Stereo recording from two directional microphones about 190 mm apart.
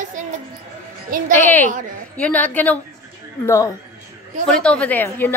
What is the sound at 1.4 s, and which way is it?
A woman's voice, 10° left (ahead or behind).